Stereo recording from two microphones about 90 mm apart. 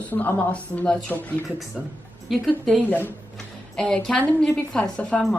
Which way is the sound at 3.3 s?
5° left (ahead or behind).